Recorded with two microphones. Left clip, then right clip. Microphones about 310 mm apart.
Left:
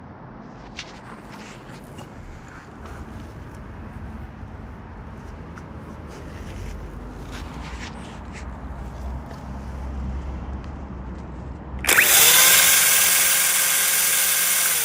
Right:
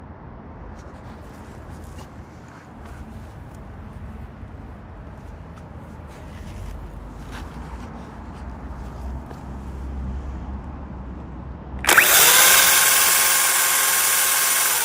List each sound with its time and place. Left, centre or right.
11.8 s drill: right